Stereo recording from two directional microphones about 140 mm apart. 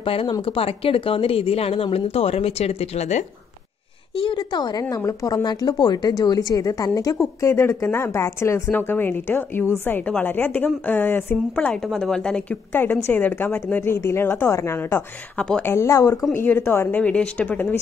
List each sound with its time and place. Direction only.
0.0 s speech: 40° left (ahead or behind)
4.1 s a woman's voice: 35° left (ahead or behind); by 15.7 s 5° left (ahead or behind)
15.7 s a woman's voice: 20° left (ahead or behind)